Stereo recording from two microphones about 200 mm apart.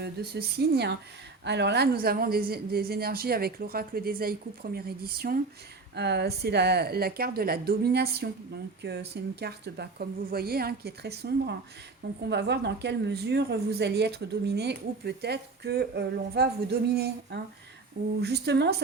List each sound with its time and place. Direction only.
0.0 s a woman's voice: 50° right (ahead or behind)